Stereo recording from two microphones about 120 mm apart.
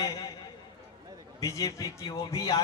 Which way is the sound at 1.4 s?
30° left (ahead or behind).